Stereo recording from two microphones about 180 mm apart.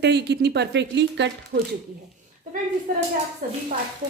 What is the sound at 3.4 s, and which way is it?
Speech, 50° right (ahead or behind).